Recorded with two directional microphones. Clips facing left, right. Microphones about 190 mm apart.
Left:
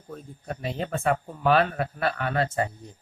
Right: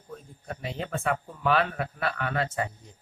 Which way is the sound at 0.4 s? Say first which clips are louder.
Left 4 dB; 40° left (ahead or behind).